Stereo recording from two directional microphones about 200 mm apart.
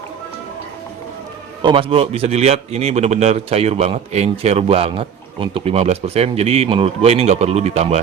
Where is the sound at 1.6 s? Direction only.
25° right (ahead or behind).